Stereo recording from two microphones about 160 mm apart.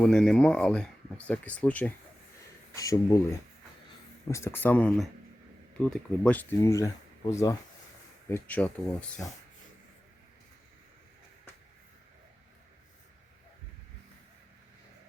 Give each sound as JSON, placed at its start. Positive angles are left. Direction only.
{"t": 0.0, "sound": "speech", "side_deg": 5}
{"t": 2.7, "sound": "speech", "side_deg": 20}
{"t": 4.3, "sound": "speech", "side_deg": 15}